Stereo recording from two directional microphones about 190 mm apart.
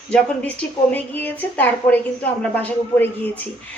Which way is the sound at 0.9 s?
10° left (ahead or behind).